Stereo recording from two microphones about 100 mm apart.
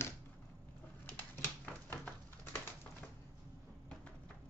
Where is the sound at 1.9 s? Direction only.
20° left (ahead or behind).